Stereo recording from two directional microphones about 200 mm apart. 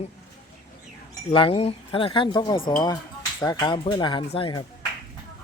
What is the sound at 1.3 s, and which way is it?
Speech, 25° left (ahead or behind).